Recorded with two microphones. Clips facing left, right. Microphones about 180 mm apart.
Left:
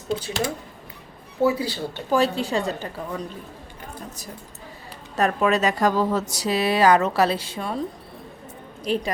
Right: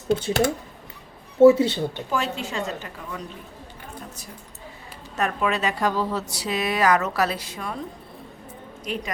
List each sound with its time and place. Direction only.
1.4 s speech: 25° right (ahead or behind)
2.0 s a woman's voice: 35° left (ahead or behind)
5.1 s a woman's voice: 40° left (ahead or behind)
8.8 s a woman's voice: 30° left (ahead or behind)